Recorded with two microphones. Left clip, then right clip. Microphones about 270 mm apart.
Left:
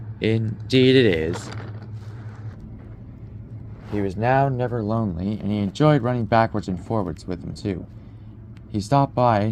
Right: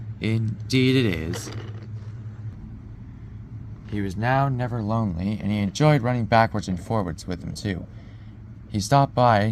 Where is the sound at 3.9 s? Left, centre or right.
Right.